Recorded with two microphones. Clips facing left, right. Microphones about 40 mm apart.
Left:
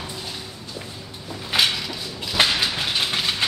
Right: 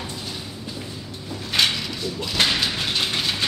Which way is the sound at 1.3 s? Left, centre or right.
Centre.